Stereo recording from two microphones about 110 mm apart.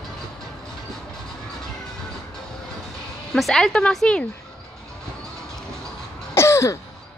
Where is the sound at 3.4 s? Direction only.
Centre (ahead or behind).